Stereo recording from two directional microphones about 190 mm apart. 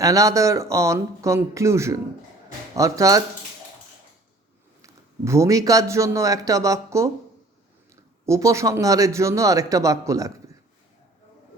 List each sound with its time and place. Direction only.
0.0 s a man's voice: 15° right (ahead or behind)
4.8 s a man's voice: 15° right (ahead or behind)
8.3 s a man's voice: 15° right (ahead or behind)